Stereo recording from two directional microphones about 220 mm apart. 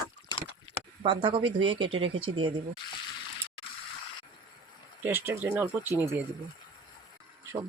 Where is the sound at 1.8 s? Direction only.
65° right (ahead or behind).